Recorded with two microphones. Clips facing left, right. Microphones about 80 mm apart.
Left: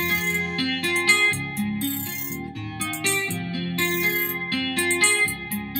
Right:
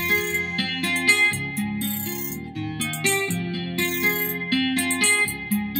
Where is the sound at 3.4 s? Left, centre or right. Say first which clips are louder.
Even; left.